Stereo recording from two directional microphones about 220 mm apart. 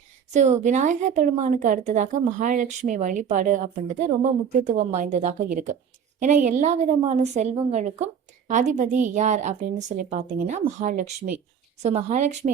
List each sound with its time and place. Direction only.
0.3 s speech: 30° right (ahead or behind)